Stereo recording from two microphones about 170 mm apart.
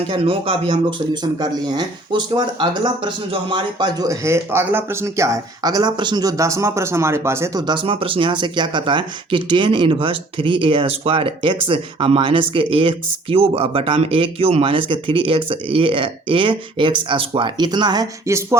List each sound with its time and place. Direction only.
0.1 s speech: 30° right (ahead or behind)